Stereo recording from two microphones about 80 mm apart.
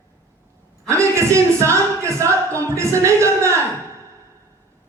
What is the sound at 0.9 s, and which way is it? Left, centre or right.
Speech, right.